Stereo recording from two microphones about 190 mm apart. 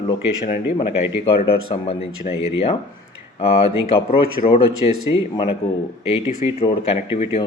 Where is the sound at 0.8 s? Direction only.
30° left (ahead or behind).